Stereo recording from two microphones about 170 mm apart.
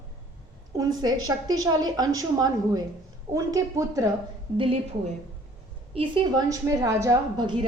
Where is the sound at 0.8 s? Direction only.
25° right (ahead or behind).